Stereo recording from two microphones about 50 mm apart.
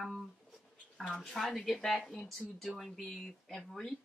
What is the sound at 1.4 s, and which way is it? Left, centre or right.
A woman's voice, centre.